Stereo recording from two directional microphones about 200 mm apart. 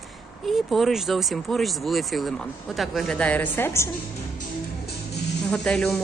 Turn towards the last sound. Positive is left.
turn(degrees=5)  # may be behind; listen again after turning